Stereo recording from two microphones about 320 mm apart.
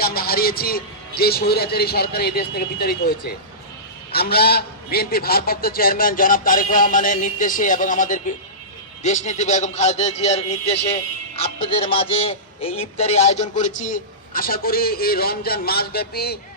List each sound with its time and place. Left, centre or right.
0.0 s a man's voice: left